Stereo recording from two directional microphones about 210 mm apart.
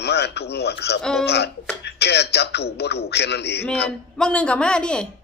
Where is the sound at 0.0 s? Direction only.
50° left (ahead or behind).